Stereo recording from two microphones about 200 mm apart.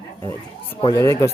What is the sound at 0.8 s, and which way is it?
Speech, 15° left (ahead or behind).